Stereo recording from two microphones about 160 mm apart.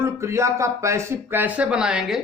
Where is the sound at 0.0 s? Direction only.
15° right (ahead or behind).